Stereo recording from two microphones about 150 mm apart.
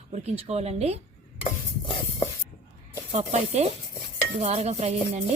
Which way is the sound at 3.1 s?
50° right (ahead or behind).